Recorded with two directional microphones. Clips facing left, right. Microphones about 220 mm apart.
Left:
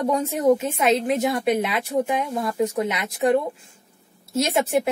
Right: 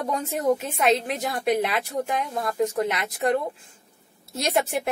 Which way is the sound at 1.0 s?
Centre (ahead or behind).